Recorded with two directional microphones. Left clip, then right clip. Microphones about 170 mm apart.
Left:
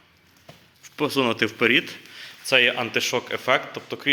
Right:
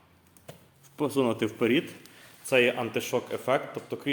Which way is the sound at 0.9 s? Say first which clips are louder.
Left 5 dB; centre (ahead or behind).